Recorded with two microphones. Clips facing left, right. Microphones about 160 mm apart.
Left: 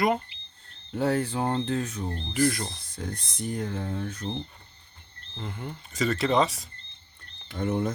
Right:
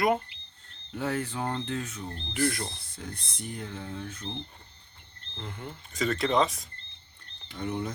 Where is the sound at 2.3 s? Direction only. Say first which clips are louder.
Left 3 dB; centre (ahead or behind).